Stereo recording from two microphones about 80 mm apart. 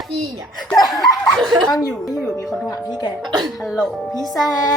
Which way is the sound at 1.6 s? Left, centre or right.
Left.